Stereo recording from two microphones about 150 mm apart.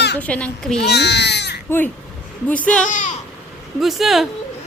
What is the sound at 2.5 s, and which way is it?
Speech, 10° left (ahead or behind).